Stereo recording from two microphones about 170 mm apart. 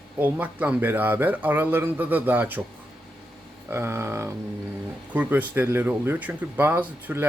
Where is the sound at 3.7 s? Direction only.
15° right (ahead or behind).